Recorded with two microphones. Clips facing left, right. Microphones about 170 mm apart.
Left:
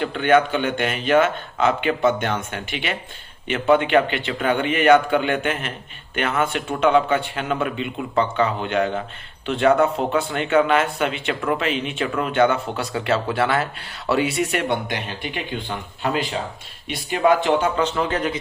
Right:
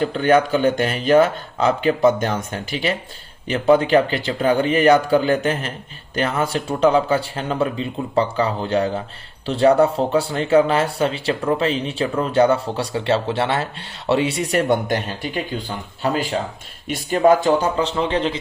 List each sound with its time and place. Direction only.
0.0 s speech: 40° right (ahead or behind)